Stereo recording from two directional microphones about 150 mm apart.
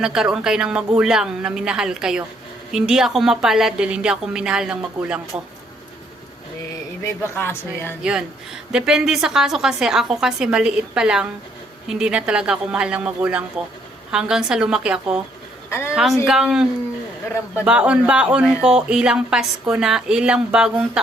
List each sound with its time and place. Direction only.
0.0 s a man's voice: 5° right (ahead or behind)
7.2 s speech: 15° left (ahead or behind)
8.7 s a man's voice: 5° right (ahead or behind)
16.2 s a man's voice: 5° right (ahead or behind)